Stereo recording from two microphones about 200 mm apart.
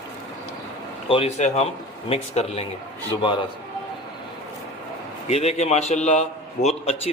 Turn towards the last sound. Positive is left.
turn(degrees=30)  # may be behind; listen again after turning